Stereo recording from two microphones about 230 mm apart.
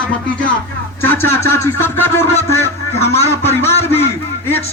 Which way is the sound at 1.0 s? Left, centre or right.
Centre.